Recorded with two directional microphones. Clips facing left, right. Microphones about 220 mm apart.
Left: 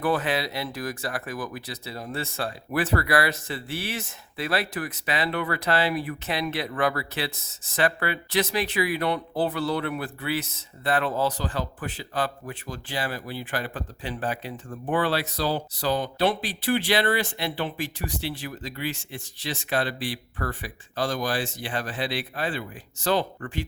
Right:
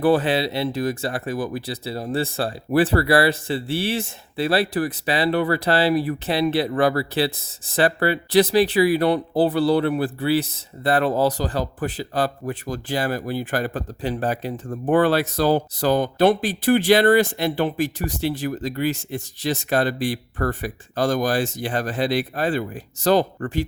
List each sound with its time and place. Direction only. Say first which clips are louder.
0.0 s speech: right 7 dB; 30° right (ahead or behind)